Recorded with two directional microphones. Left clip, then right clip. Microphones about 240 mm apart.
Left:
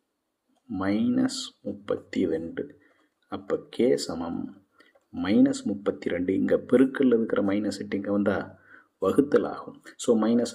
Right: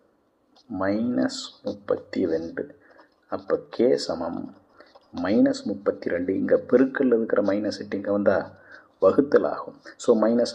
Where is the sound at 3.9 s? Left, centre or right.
Left.